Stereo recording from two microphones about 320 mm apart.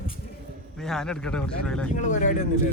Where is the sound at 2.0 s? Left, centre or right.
Left.